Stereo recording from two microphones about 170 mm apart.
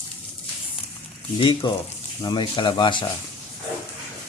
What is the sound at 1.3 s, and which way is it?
Speech, 30° left (ahead or behind).